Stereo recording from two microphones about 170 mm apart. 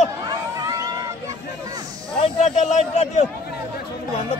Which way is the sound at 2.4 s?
40° left (ahead or behind).